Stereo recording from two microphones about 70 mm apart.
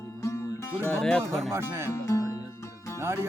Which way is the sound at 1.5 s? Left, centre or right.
Right.